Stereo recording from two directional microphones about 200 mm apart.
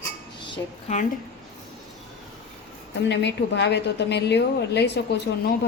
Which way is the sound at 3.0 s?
60° left (ahead or behind).